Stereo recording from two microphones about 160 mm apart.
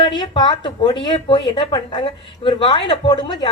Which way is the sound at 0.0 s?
30° left (ahead or behind).